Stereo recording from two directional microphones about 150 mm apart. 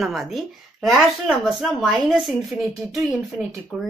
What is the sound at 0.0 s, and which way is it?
Speech, centre (ahead or behind).